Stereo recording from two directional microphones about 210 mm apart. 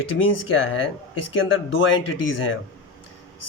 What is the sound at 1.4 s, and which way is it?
Speech, 65° left (ahead or behind).